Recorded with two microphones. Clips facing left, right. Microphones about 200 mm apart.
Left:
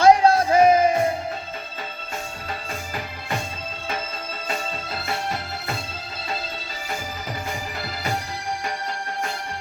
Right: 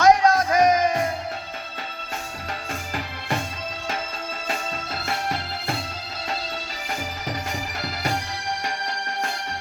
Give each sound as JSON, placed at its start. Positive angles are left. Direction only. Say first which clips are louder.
{"t": 0.0, "sound": "music", "louder": "left 2 dB", "side_deg": 30}